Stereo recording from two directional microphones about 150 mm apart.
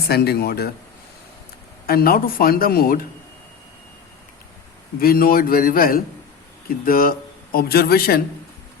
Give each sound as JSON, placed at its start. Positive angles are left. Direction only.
{"t": 0.1, "sound": "speech", "side_deg": 90}
{"t": 1.9, "sound": "speech", "side_deg": 80}
{"t": 4.9, "sound": "speech", "side_deg": 75}